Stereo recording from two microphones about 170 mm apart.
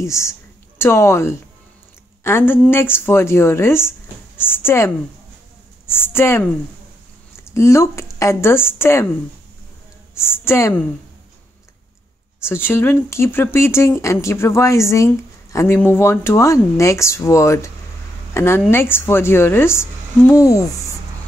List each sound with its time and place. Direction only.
0.0 s a woman's voice: 15° left (ahead or behind)
7.5 s speech: 15° left (ahead or behind)
10.1 s speech: 15° left (ahead or behind)
12.4 s a woman's voice: 15° left (ahead or behind)